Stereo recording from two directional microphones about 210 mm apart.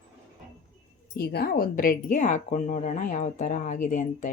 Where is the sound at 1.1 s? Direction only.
50° left (ahead or behind).